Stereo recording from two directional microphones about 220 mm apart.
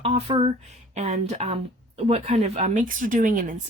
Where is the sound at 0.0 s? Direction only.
25° right (ahead or behind).